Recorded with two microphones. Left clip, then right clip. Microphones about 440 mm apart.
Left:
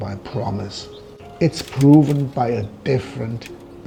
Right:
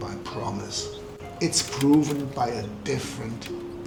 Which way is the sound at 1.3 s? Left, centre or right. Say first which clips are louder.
Left 5 dB; left.